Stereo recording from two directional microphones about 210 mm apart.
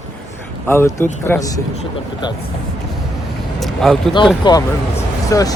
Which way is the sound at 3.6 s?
Centre (ahead or behind).